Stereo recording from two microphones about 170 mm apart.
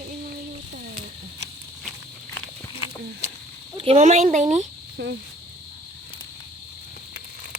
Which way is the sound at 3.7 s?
35° right (ahead or behind).